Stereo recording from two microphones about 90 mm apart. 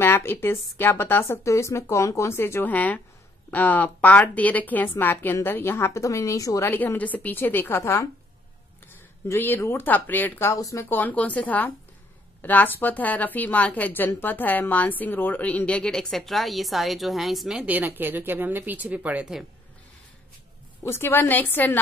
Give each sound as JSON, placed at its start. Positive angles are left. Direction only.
{"t": 0.0, "sound": "a woman's voice", "side_deg": 25}
{"t": 6.7, "sound": "a woman's voice", "side_deg": 20}
{"t": 9.3, "sound": "a woman's voice", "side_deg": 25}
{"t": 10.5, "sound": "speech", "side_deg": 35}
{"t": 10.9, "sound": "a woman's voice", "side_deg": 20}
{"t": 17.6, "sound": "speech", "side_deg": -20}
{"t": 20.8, "sound": "a woman's voice", "side_deg": 25}